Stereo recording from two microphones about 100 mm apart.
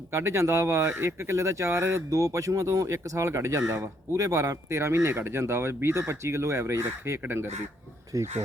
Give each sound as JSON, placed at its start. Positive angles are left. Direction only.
{"t": 0.1, "sound": "speech", "side_deg": -30}